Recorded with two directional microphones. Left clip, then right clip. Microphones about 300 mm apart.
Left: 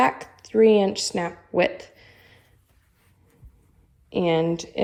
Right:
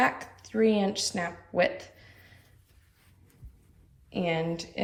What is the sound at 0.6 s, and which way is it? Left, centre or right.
Speech, left.